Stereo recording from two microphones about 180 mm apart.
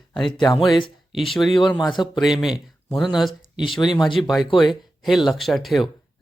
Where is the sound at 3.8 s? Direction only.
25° left (ahead or behind).